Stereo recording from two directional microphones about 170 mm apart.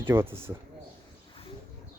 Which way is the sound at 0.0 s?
15° right (ahead or behind).